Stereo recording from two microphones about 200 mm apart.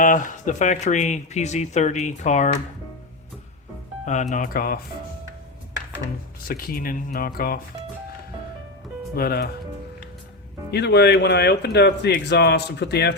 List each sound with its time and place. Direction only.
0.0 s speech: 40° left (ahead or behind)
4.0 s speech: 35° left (ahead or behind)
6.5 s speech: 45° left (ahead or behind)
9.1 s speech: 50° left (ahead or behind)
10.7 s speech: 55° left (ahead or behind)